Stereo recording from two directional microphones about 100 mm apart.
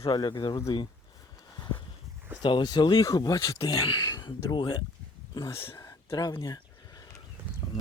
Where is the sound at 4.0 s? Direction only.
30° left (ahead or behind).